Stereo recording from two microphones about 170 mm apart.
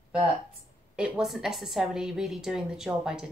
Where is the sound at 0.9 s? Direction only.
5° right (ahead or behind).